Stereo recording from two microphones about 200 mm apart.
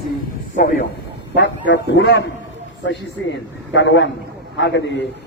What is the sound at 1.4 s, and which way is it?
A man's voice, 60° left (ahead or behind).